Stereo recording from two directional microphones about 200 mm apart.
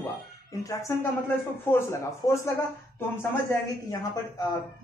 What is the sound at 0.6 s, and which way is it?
Speech, 15° left (ahead or behind).